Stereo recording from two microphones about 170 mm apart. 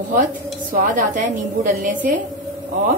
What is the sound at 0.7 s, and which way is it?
A woman's voice, 50° right (ahead or behind).